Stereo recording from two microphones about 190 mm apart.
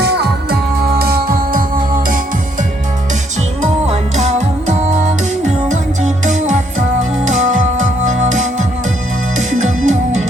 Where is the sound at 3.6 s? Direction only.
35° right (ahead or behind).